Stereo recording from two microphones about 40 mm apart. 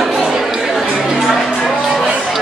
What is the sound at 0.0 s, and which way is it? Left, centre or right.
Chatter, centre.